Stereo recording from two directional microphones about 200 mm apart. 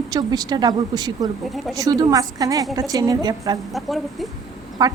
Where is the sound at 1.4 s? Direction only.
Centre (ahead or behind).